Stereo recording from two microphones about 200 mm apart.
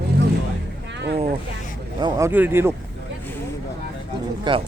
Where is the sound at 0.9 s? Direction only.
60° right (ahead or behind).